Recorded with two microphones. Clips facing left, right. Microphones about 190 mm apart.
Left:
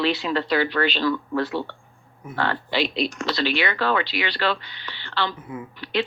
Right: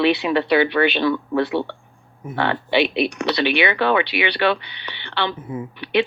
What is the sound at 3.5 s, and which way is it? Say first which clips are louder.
Speech: right 5 dB; 15° right (ahead or behind).